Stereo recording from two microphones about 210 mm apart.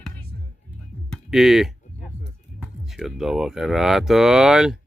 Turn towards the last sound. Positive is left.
turn(degrees=-5)  # may be behind; listen again after turning